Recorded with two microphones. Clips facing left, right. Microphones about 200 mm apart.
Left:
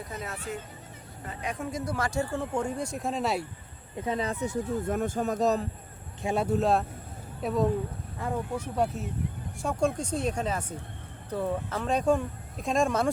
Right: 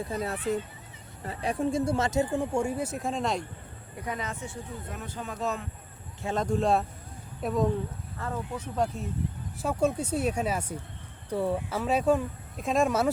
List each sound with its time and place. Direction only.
0.1 s speech: 35° right (ahead or behind); by 3.4 s 5° left (ahead or behind)
3.9 s speech: 25° left (ahead or behind)
6.2 s speech: 10° left (ahead or behind)
8.2 s speech: 10° left (ahead or behind)
9.6 s speech: 5° right (ahead or behind)